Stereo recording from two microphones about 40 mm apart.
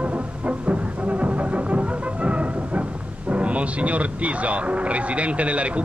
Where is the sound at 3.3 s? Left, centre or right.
Right.